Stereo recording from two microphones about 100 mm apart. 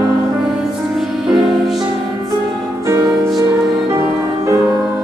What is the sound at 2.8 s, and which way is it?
Music, 35° right (ahead or behind).